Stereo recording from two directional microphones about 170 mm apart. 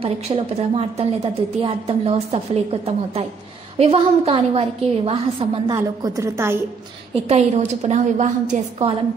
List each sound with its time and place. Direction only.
0.0 s a woman's voice: 35° right (ahead or behind)
5.7 s a woman's voice: 20° right (ahead or behind)
7.2 s a woman's voice: 40° right (ahead or behind)